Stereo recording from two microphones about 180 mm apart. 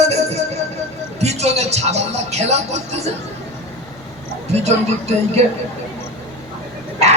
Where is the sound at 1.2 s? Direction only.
35° right (ahead or behind).